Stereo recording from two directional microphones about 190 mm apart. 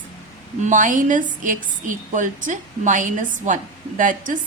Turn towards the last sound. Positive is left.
turn(degrees=-45)  # may be behind; listen again after turning